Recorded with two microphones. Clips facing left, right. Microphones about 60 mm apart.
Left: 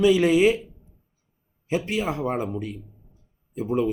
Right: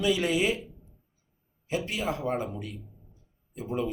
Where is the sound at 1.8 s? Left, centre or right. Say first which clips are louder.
Left 5 dB; left.